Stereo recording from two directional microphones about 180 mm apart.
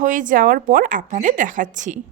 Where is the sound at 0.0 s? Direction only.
45° right (ahead or behind).